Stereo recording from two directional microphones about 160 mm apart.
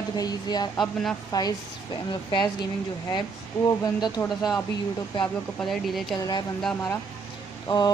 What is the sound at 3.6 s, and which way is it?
Speech, 25° left (ahead or behind).